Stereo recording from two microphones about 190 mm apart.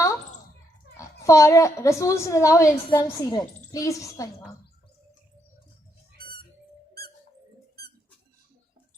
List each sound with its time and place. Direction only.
1.2 s a woman's voice: 15° left (ahead or behind)